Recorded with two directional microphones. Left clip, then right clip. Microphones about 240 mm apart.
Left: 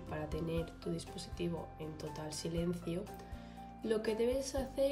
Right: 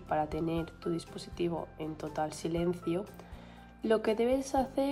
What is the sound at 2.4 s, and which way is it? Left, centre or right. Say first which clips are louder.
Speech: right 6 dB; centre.